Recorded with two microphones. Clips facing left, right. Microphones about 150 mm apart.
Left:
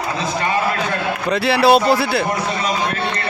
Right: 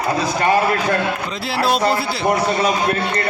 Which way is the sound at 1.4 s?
70° left (ahead or behind).